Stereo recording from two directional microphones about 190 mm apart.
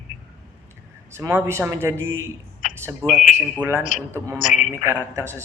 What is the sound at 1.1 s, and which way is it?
Speech, 15° right (ahead or behind).